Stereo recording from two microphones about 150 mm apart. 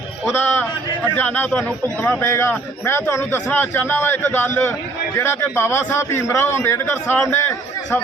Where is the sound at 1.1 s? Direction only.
10° left (ahead or behind).